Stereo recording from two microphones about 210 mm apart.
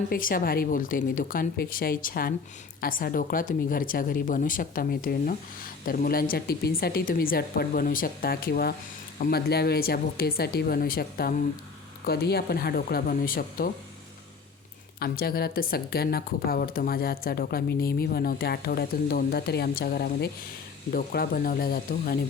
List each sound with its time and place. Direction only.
0.1 s speech: 40° left (ahead or behind)
14.9 s speech: 45° left (ahead or behind)